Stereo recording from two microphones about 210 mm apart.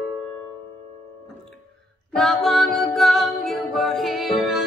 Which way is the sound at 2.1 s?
Centre (ahead or behind).